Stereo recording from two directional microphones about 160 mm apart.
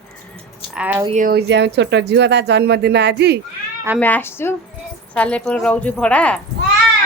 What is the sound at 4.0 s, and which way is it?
A woman's voice, 10° left (ahead or behind).